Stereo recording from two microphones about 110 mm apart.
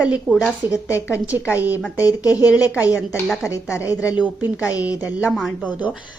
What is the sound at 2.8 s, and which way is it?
Speech, 15° right (ahead or behind).